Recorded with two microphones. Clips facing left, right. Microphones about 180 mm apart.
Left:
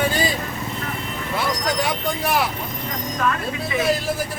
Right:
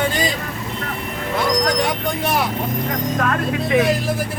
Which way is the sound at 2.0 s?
Centre (ahead or behind).